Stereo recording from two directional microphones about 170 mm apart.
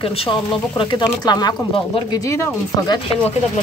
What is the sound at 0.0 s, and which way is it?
Speech, 35° left (ahead or behind).